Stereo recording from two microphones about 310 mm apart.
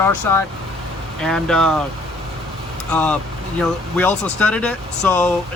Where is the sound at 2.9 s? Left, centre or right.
Centre.